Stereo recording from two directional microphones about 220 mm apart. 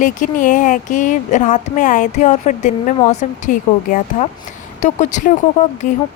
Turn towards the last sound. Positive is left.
turn(degrees=40)  # may be behind; listen again after turning